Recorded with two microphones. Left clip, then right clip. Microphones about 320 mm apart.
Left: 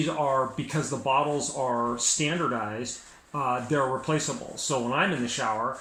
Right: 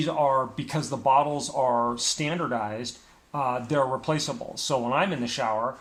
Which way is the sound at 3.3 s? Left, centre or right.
Centre.